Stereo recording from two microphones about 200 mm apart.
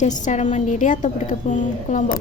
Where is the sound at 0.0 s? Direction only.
35° left (ahead or behind).